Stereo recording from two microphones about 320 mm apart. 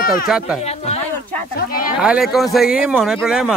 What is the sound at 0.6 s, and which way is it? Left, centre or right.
A woman's voice, centre.